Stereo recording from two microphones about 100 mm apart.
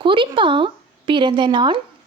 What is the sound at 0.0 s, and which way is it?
A woman's voice, 55° right (ahead or behind).